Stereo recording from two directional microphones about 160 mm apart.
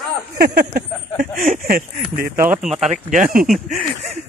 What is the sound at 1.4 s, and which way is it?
Speech, 60° right (ahead or behind).